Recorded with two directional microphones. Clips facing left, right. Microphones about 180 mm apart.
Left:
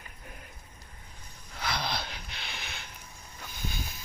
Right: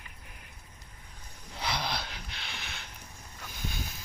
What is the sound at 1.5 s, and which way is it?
Wheeze, 20° right (ahead or behind).